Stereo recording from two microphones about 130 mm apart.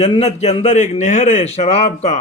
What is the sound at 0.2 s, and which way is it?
A man's voice, 55° left (ahead or behind).